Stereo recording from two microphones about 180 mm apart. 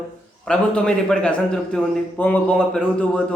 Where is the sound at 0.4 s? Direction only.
5° left (ahead or behind).